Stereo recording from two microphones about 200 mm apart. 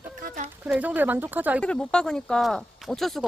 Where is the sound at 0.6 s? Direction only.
10° right (ahead or behind).